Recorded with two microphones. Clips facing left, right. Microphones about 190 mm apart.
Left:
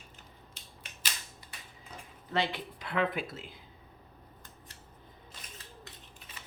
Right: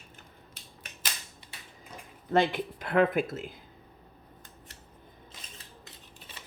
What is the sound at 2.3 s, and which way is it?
Speech, 50° right (ahead or behind).